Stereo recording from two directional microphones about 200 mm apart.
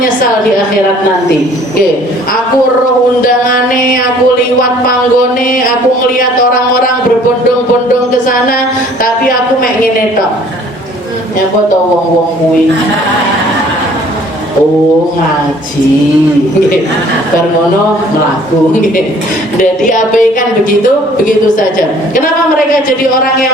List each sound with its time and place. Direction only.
19.5 s speech: 40° left (ahead or behind)
22.1 s a woman's voice: 45° left (ahead or behind)